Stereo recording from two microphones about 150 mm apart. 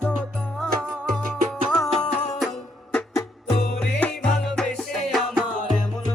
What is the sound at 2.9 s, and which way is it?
Music, 10° left (ahead or behind).